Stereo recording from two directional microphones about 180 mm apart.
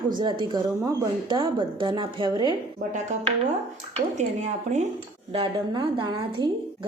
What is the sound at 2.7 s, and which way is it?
Speech, 40° right (ahead or behind).